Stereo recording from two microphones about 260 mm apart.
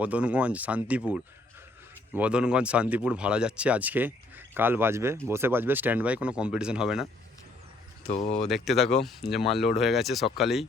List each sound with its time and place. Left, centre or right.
0.0 s speech: centre
8.0 s speech: left
8.4 s speech: centre